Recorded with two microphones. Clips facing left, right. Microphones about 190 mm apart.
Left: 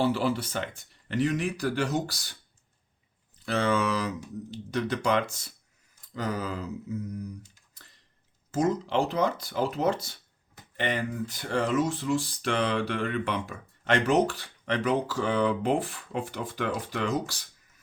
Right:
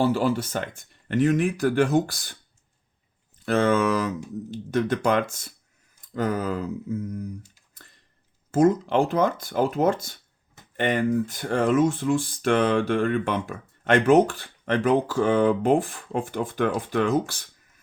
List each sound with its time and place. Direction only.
0.0 s speech: 45° right (ahead or behind)
3.4 s speech: 50° right (ahead or behind)
8.5 s speech: 50° right (ahead or behind)